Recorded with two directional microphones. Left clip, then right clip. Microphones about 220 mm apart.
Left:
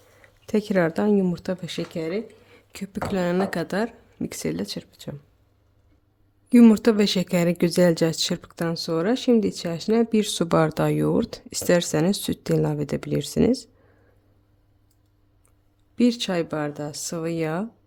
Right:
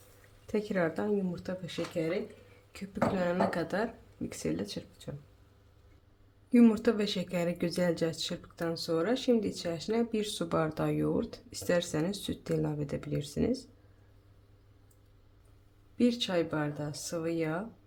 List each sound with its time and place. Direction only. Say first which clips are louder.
0.4 s speech: left 9 dB; 40° left (ahead or behind)
6.5 s speech: left 9 dB; 50° left (ahead or behind)
16.0 s speech: left 6 dB; 50° left (ahead or behind)